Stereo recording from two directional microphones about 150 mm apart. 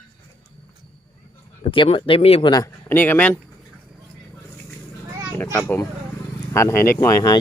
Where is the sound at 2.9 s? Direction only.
15° left (ahead or behind).